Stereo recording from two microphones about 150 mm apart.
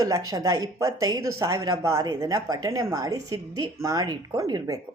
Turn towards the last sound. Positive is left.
turn(degrees=-25)  # may be behind; listen again after turning